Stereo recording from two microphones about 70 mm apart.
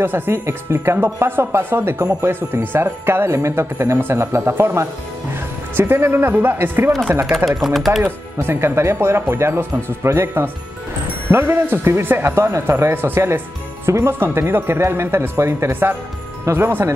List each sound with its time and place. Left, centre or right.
0.0 s speech: right
7.3 s speech: centre
8.0 s speech: right
15.7 s speech: right